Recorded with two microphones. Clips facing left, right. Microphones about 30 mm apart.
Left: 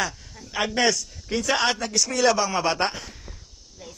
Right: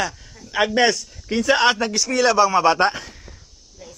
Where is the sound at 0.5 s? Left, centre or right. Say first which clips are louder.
Right 5 dB; centre.